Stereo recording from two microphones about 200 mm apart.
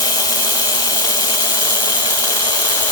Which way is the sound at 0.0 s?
20° left (ahead or behind).